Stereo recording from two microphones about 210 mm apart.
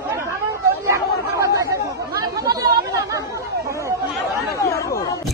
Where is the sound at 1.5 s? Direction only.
15° right (ahead or behind).